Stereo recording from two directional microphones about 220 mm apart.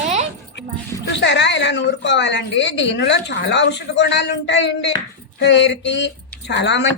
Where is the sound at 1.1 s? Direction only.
55° left (ahead or behind).